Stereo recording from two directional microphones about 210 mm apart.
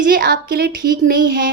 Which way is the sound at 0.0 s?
45° right (ahead or behind).